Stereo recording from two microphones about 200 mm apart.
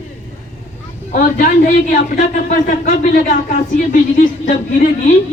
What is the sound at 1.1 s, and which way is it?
A man's voice, 40° left (ahead or behind).